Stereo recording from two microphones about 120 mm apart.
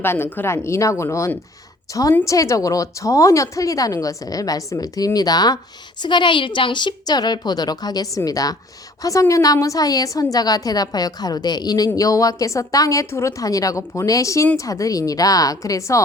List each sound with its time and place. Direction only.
0.0 s a woman's voice: 20° left (ahead or behind)